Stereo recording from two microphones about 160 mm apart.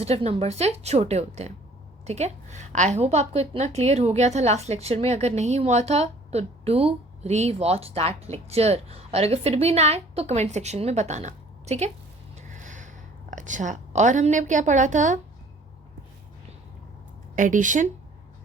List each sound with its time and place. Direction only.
0.0 s a woman's voice: 40° right (ahead or behind)
12.4 s a sound: 50° right (ahead or behind)
13.3 s a woman's voice: 50° right (ahead or behind)
17.3 s a woman's voice: 55° right (ahead or behind)